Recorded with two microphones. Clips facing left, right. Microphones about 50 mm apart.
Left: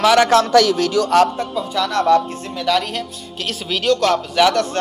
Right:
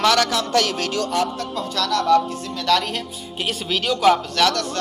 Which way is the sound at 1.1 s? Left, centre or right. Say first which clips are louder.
Left 9 dB; left.